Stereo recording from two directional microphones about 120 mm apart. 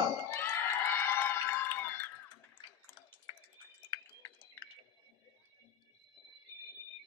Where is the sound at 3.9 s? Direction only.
40° left (ahead or behind).